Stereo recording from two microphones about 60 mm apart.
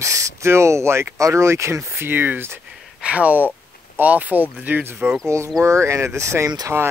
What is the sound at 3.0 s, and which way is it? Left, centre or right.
Speech, right.